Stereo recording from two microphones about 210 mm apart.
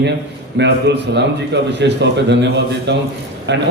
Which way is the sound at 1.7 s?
55° right (ahead or behind).